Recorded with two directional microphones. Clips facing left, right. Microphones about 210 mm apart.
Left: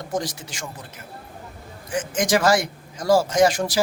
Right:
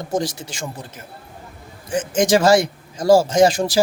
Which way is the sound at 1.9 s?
25° right (ahead or behind).